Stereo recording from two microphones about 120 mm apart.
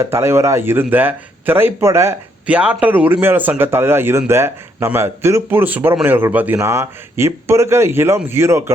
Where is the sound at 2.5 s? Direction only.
10° right (ahead or behind).